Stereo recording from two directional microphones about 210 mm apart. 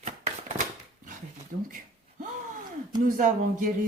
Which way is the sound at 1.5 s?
40° right (ahead or behind).